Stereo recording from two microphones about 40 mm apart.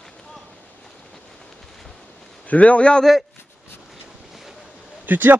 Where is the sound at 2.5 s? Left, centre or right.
Left.